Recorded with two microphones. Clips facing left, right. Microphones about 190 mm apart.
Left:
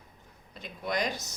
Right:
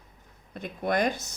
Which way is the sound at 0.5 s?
55° right (ahead or behind).